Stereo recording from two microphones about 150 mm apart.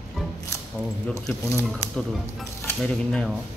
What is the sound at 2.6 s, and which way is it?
Speech, 5° left (ahead or behind).